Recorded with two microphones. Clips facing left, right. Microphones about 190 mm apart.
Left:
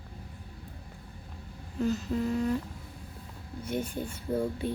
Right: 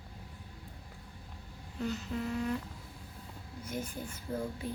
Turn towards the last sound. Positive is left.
turn(degrees=30)  # may be behind; listen again after turning